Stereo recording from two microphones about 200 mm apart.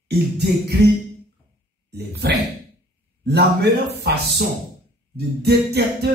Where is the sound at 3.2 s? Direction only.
55° right (ahead or behind).